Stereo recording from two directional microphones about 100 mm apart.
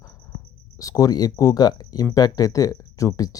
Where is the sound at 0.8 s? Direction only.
35° left (ahead or behind).